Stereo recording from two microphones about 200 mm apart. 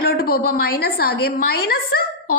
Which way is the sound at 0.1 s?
50° left (ahead or behind).